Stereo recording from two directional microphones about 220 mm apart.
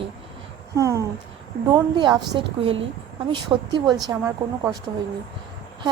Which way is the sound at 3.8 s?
Centre (ahead or behind).